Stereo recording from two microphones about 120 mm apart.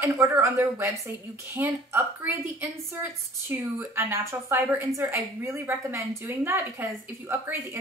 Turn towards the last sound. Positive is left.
turn(degrees=-15)  # may be behind; listen again after turning